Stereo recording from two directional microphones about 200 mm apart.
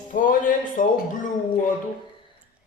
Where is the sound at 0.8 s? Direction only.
40° left (ahead or behind).